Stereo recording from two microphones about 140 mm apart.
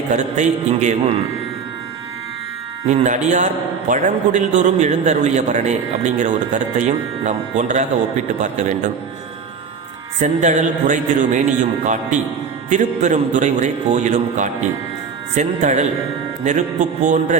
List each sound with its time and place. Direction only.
0.1 s a man's voice: 60° right (ahead or behind)
2.8 s a man's voice: 55° right (ahead or behind)
10.2 s a man's voice: 60° right (ahead or behind)